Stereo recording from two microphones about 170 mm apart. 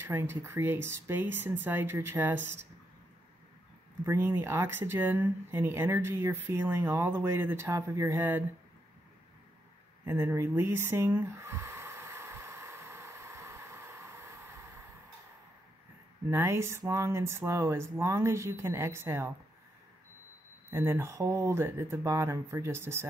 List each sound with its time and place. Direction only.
0.0 s speech: 15° right (ahead or behind)
4.0 s speech: 15° right (ahead or behind)
10.0 s a sound: 15° right (ahead or behind)
16.3 s speech: 15° right (ahead or behind)
20.7 s speech: 15° right (ahead or behind)